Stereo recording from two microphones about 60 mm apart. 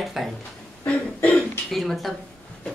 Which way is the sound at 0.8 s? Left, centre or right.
Left.